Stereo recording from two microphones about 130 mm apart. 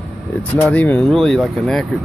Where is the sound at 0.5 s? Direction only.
10° left (ahead or behind).